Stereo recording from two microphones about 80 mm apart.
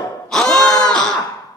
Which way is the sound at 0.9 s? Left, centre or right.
Centre.